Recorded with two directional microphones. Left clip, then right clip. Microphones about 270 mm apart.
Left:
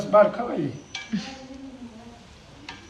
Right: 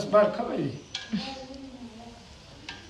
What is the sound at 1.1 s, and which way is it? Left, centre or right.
Speech, centre.